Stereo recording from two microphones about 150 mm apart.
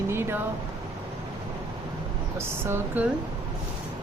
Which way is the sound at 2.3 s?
15° right (ahead or behind).